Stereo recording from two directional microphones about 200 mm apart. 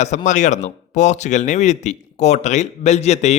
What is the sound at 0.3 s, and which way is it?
Speech, 35° left (ahead or behind).